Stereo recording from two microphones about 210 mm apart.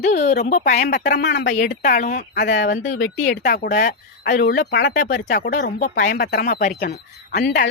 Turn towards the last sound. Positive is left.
turn(degrees=50)  # may be behind; listen again after turning